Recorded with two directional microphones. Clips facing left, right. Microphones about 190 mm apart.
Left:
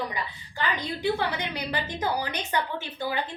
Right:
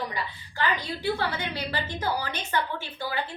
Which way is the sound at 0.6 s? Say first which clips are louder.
Right 1 dB; 15° left (ahead or behind).